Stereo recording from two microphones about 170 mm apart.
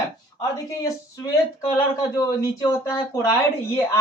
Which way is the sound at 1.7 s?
20° left (ahead or behind).